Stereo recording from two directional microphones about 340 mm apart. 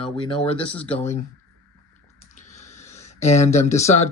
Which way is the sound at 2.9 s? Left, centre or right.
Centre.